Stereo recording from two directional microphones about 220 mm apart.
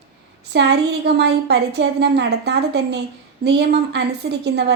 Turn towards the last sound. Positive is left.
turn(degrees=-50)  # may be behind; listen again after turning